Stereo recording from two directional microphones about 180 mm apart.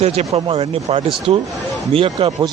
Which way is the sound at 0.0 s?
35° right (ahead or behind).